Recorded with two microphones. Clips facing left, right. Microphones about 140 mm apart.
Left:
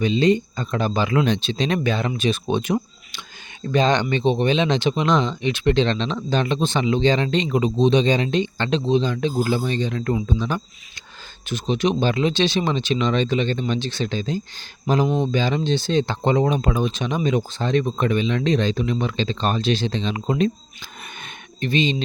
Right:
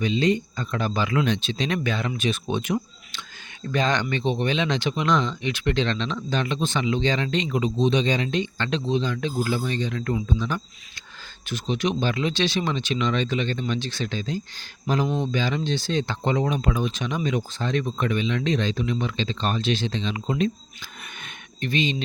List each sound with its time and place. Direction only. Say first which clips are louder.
0.0 s speech: left 4 dB; 30° left (ahead or behind)
15.0 s speech: left 4 dB; 15° left (ahead or behind)
15.3 s speech: left 4 dB; 30° left (ahead or behind)
21.2 s a sound: left 4 dB; 25° left (ahead or behind)